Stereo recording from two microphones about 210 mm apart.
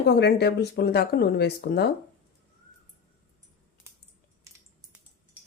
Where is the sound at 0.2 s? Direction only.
50° left (ahead or behind).